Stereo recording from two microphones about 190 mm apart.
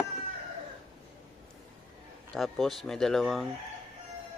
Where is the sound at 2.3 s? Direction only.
Centre (ahead or behind).